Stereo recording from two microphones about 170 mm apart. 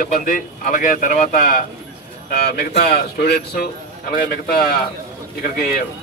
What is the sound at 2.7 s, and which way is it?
A man's voice, 55° left (ahead or behind).